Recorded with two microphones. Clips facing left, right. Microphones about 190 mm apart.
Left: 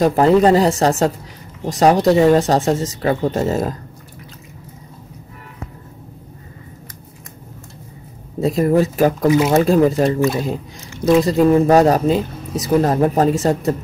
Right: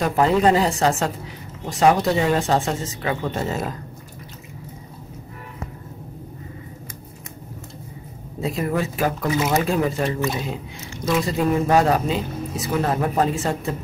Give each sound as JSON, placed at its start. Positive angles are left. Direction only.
{"t": 0.0, "sound": "speech", "side_deg": 35}
{"t": 8.4, "sound": "speech", "side_deg": 40}
{"t": 11.1, "sound": "speech", "side_deg": 40}